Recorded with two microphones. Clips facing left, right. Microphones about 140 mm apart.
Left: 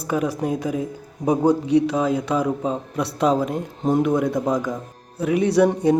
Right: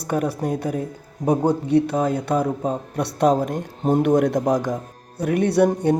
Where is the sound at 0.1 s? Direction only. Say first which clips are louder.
Even; 60° right (ahead or behind).